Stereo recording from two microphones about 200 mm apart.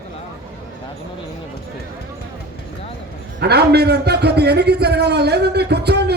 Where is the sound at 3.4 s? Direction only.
55° right (ahead or behind).